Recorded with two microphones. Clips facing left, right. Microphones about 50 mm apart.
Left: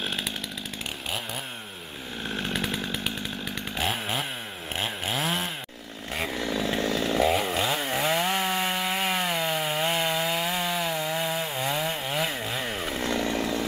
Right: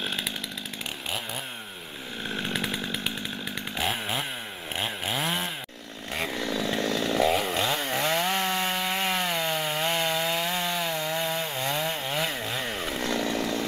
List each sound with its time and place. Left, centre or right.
0.0 s chainsaw: centre
2.3 s chainsaw: centre